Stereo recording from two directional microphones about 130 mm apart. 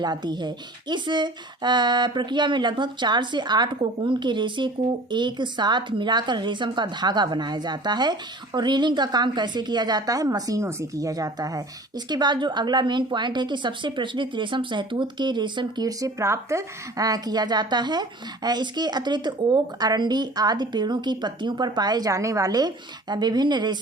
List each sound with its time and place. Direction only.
0.0 s speech: 35° right (ahead or behind)